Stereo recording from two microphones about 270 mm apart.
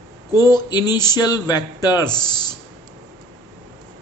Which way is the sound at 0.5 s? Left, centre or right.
Centre.